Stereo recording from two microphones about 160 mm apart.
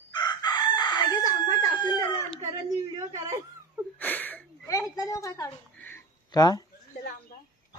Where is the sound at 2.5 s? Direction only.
25° right (ahead or behind).